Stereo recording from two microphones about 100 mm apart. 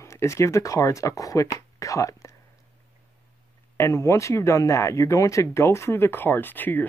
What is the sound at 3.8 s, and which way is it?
Speech, 30° left (ahead or behind).